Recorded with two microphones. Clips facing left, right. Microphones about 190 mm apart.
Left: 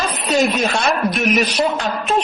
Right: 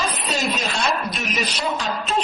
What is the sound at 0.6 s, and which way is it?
A woman's voice, 70° left (ahead or behind).